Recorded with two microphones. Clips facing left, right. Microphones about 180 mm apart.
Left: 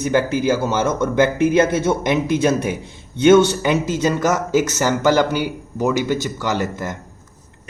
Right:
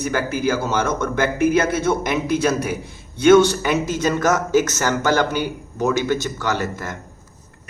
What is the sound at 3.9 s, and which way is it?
A man's voice, 15° left (ahead or behind).